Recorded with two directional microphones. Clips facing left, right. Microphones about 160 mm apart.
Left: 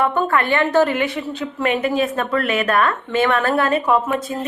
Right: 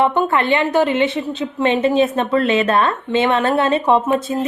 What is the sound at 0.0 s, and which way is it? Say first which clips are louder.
A woman's voice: right 2 dB; 20° right (ahead or behind).